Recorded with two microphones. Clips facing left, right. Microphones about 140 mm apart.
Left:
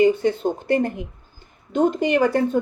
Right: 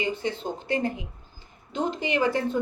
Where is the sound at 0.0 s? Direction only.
55° left (ahead or behind).